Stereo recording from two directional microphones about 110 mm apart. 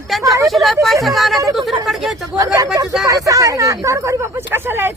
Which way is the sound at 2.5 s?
35° right (ahead or behind).